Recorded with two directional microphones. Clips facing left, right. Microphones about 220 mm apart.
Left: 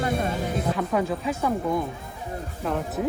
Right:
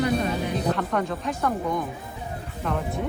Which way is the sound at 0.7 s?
5° left (ahead or behind).